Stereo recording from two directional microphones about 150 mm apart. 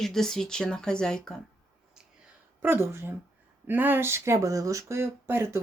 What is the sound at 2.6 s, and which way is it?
Speech, 15° right (ahead or behind).